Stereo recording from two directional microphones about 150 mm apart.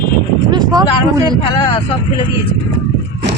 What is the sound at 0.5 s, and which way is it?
Speech, 25° right (ahead or behind).